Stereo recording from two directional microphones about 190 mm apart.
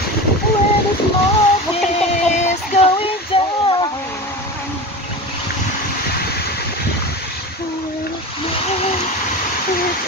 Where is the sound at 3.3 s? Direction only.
30° left (ahead or behind).